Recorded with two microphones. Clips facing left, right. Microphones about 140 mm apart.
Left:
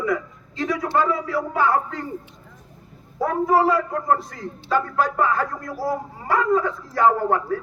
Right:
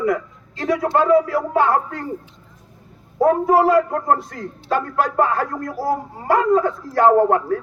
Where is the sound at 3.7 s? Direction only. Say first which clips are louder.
Right 4 dB; 50° right (ahead or behind).